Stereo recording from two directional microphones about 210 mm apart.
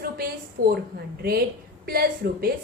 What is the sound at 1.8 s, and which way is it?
Speech, 45° right (ahead or behind).